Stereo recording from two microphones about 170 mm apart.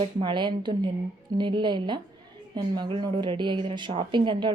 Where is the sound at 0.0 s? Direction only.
30° right (ahead or behind).